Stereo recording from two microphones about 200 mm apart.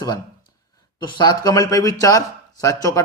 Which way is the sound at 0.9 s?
20° left (ahead or behind).